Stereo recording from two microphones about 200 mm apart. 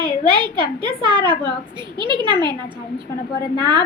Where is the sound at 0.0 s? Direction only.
25° right (ahead or behind).